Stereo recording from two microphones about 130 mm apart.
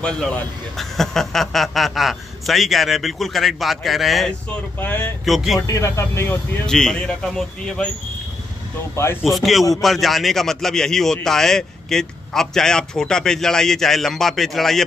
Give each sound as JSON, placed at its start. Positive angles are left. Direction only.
{"t": 0.0, "sound": "a man's voice", "side_deg": 5}
{"t": 4.7, "sound": "speech", "side_deg": 15}
{"t": 5.2, "sound": "a man's voice", "side_deg": 0}
{"t": 5.7, "sound": "speech", "side_deg": 25}
{"t": 6.6, "sound": "a man's voice", "side_deg": 5}
{"t": 8.9, "sound": "speech", "side_deg": 20}
{"t": 9.2, "sound": "a man's voice", "side_deg": 0}